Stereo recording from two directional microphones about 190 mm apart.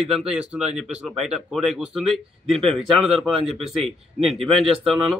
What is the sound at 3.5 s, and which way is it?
Speech, 30° right (ahead or behind).